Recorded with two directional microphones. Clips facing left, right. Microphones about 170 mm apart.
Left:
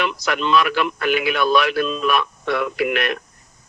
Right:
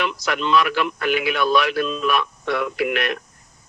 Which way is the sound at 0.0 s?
65° left (ahead or behind).